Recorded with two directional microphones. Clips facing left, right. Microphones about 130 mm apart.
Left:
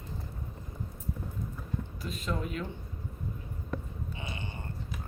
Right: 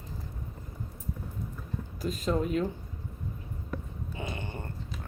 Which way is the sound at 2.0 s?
40° right (ahead or behind).